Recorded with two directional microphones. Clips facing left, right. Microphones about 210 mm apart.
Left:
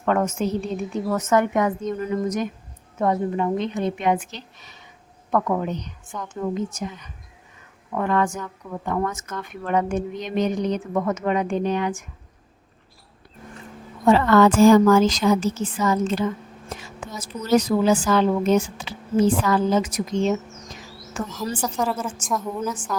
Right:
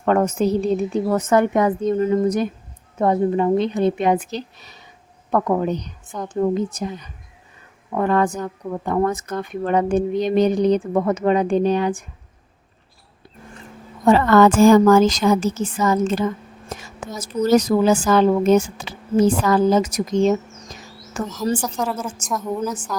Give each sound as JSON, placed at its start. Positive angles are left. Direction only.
{"t": 0.0, "sound": "speech", "side_deg": -35}
{"t": 14.0, "sound": "a woman's voice", "side_deg": -45}
{"t": 21.6, "sound": "a woman's voice", "side_deg": 0}